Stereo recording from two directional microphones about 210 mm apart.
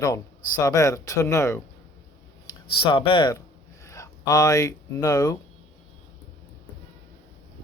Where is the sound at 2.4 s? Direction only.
25° left (ahead or behind).